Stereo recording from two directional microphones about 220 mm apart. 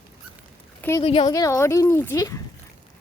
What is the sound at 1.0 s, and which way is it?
Speech, 25° left (ahead or behind).